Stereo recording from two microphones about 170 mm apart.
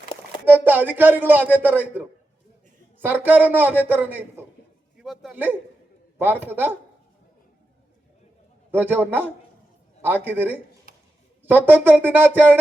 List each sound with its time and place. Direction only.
0.4 s a man's voice: 10° right (ahead or behind)
8.7 s a man's voice: 10° right (ahead or behind)
10.9 s a sound: 60° right (ahead or behind)
11.4 s a man's voice: 10° right (ahead or behind)